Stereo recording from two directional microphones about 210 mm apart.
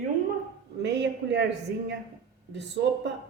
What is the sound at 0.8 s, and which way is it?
A man's voice, 55° right (ahead or behind).